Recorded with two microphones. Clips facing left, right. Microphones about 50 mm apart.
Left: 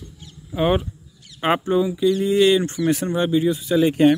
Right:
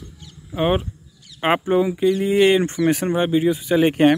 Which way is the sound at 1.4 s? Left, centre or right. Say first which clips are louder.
Right 1 dB; right.